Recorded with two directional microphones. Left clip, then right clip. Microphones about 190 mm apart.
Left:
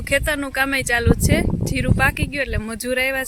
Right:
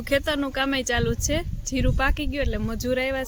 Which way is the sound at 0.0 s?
Centre (ahead or behind).